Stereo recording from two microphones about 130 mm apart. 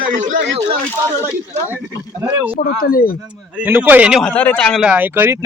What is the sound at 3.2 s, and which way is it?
Speech, 10° right (ahead or behind).